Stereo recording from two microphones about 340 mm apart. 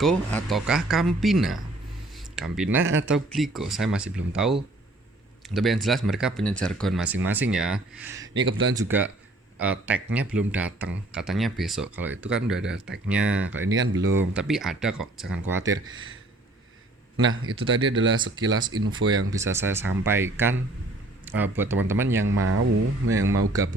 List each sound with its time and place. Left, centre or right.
0.0 s speech: centre
8.3 s speech: right
8.7 s speech: centre
13.7 s speech: right
14.0 s speech: centre
17.2 s speech: right
18.5 s speech: centre
18.9 s speech: right
19.3 s speech: centre
22.2 s speech: right